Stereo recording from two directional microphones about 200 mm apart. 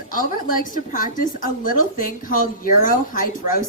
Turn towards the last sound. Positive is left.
turn(degrees=40)  # may be behind; listen again after turning